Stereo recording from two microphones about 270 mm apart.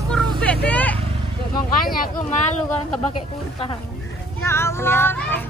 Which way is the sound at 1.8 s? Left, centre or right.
Left.